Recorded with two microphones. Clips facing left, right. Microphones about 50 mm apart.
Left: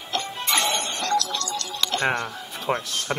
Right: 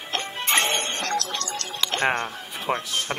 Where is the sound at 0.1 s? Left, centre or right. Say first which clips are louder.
Right 1 dB; right.